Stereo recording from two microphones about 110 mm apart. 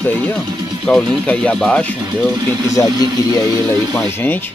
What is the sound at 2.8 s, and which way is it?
Speech, 25° left (ahead or behind).